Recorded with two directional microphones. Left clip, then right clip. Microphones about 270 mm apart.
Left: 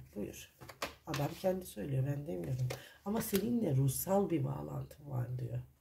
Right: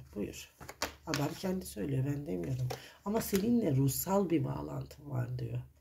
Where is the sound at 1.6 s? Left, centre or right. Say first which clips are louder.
Right 4 dB; right.